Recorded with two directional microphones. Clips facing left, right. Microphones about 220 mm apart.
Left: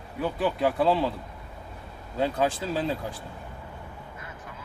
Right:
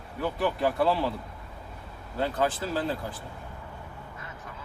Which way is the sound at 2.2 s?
15° left (ahead or behind).